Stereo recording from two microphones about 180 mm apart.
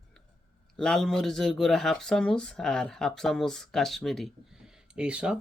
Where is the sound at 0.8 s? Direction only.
5° left (ahead or behind).